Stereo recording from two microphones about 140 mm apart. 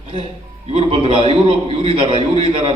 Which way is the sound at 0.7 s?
45° right (ahead or behind).